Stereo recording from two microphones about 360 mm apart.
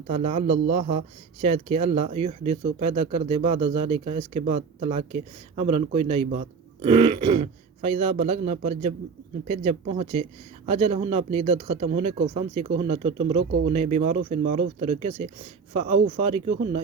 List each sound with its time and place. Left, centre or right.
0.1 s a man's voice: centre